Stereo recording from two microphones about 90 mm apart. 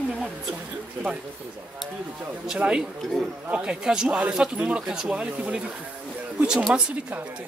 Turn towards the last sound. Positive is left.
turn(degrees=-10)  # may be behind; listen again after turning